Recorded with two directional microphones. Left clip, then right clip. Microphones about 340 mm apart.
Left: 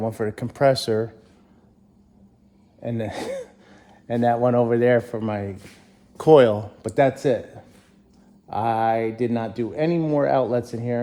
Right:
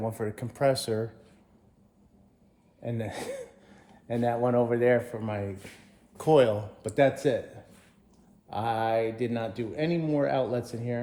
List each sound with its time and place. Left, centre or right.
0.0 s speech: left
2.8 s speech: left
8.4 s speech: left